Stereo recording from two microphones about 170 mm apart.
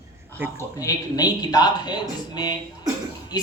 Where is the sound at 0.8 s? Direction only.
20° left (ahead or behind).